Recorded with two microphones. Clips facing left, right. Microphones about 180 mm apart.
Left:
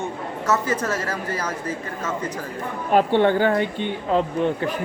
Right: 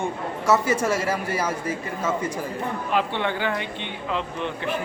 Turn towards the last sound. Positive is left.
turn(degrees=45)  # may be behind; listen again after turning